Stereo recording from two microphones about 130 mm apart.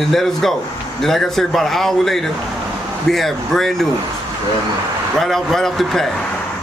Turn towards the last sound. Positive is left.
turn(degrees=0)  # may be behind; listen again after turning